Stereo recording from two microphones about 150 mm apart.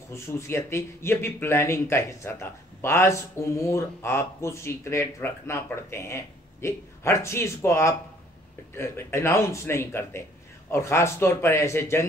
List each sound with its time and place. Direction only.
0.1 s speech: 15° left (ahead or behind)